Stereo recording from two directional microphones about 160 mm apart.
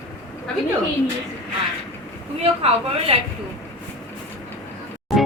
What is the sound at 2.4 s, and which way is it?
Speech, 35° right (ahead or behind).